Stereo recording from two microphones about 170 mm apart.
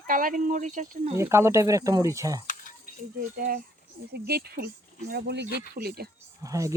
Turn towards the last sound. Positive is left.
turn(degrees=-20)  # may be behind; listen again after turning